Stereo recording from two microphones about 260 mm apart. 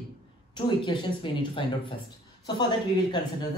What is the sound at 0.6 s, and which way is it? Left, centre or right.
Speech, centre.